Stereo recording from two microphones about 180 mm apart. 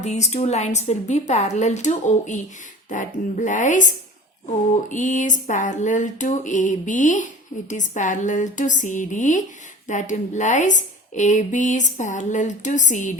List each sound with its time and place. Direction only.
0.0 s a woman's voice: 40° left (ahead or behind)